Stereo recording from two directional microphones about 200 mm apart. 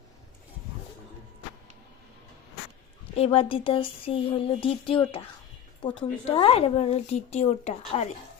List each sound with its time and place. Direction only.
3.2 s speech: 30° left (ahead or behind)
6.2 s a woman's voice: 30° left (ahead or behind)